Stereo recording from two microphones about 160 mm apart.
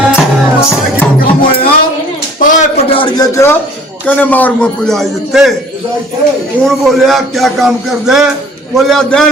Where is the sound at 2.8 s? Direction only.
30° left (ahead or behind).